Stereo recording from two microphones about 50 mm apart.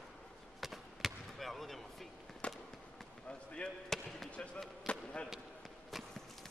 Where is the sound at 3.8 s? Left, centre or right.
Centre.